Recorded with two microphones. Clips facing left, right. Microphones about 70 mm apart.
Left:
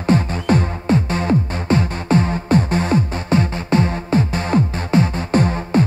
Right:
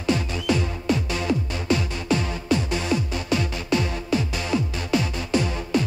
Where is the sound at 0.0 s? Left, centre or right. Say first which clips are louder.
Left 6 dB; left.